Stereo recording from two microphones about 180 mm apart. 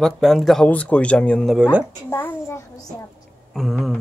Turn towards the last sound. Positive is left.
turn(degrees=0)  # may be behind; listen again after turning